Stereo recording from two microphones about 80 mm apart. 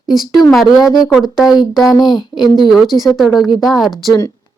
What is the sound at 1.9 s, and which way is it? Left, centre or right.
Speech, left.